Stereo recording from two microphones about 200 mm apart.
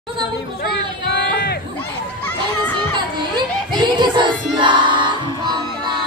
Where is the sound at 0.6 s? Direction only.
55° left (ahead or behind).